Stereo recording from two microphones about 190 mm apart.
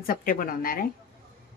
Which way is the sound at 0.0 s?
50° left (ahead or behind).